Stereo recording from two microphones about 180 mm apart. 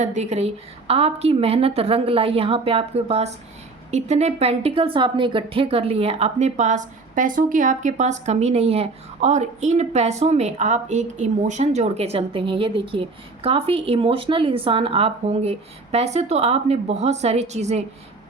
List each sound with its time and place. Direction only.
0.0 s a woman's voice: 40° right (ahead or behind)